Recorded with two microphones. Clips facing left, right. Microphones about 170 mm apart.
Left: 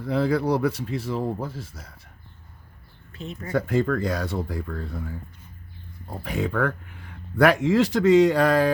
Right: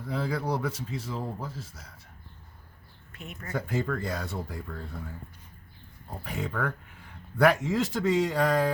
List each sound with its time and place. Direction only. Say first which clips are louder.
0.0 s speech: left 8 dB; 70° left (ahead or behind)
3.1 s a sound: left 8 dB; 30° left (ahead or behind)
3.5 s speech: left 7 dB; 85° left
6.2 s speech: left 7 dB; 85° left
7.3 s speech: left 5 dB; 90° left